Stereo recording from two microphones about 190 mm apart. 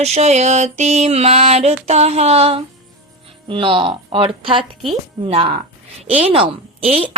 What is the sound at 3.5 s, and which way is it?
A woman's voice, 25° right (ahead or behind).